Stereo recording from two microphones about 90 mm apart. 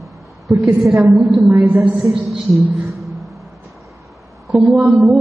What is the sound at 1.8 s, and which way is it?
A woman's voice, centre (ahead or behind).